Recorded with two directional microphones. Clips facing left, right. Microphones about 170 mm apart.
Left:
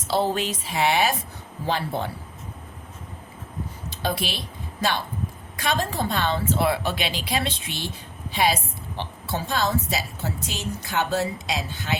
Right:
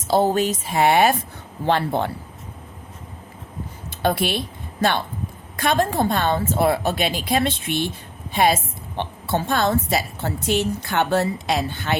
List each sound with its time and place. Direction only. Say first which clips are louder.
0.1 s a woman's voice: right 5 dB; 45° right (ahead or behind)
1.6 s a woman's voice: right 6 dB; 65° right (ahead or behind)
4.0 s a woman's voice: right 7 dB; 55° right (ahead or behind)